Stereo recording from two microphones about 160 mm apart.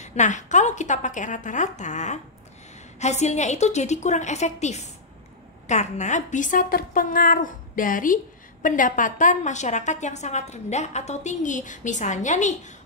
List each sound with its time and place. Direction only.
0.0 s a woman's voice: 45° left (ahead or behind)